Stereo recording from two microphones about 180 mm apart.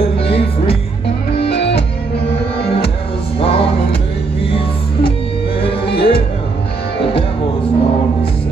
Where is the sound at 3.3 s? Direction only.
30° left (ahead or behind).